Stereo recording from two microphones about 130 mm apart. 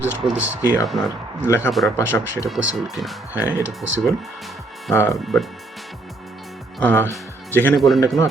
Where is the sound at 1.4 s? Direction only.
20° left (ahead or behind).